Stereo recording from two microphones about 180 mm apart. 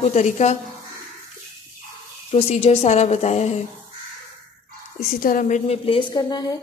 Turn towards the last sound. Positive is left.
turn(degrees=20)  # may be behind; listen again after turning